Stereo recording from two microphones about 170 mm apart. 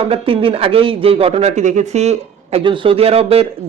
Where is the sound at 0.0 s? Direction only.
35° right (ahead or behind).